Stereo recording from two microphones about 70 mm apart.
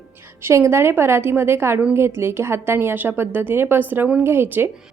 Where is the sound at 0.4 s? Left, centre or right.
Right.